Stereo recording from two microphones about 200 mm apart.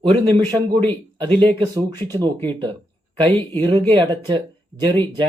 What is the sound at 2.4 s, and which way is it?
Speech, 25° right (ahead or behind).